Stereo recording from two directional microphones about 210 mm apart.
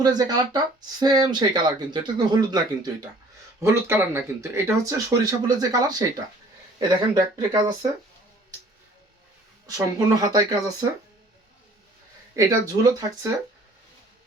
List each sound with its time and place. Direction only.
0.0 s speech: 20° right (ahead or behind)
9.6 s speech: 15° right (ahead or behind)
12.4 s speech: 15° right (ahead or behind)